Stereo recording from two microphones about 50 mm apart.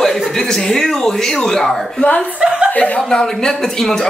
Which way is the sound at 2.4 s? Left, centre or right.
Centre.